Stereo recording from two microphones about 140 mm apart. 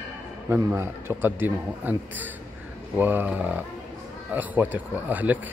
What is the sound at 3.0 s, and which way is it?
Speech, 15° right (ahead or behind).